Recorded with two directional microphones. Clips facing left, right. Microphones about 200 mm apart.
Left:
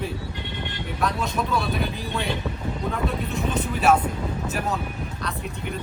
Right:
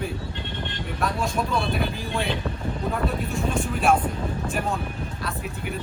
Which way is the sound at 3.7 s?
5° left (ahead or behind).